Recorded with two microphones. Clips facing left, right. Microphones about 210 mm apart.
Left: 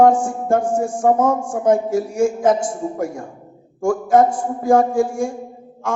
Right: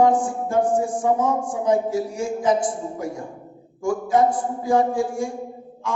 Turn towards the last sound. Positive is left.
turn(degrees=50)  # may be behind; listen again after turning